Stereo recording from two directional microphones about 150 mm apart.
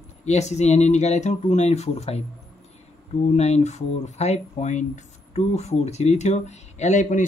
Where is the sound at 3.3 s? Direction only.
45° left (ahead or behind).